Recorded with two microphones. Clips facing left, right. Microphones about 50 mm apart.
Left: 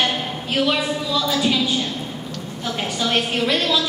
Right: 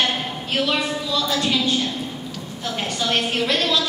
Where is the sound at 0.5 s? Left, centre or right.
Centre.